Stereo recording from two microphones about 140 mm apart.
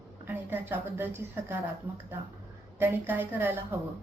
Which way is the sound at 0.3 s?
15° right (ahead or behind).